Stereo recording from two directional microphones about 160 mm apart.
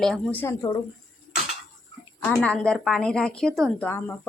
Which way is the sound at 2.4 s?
5° left (ahead or behind).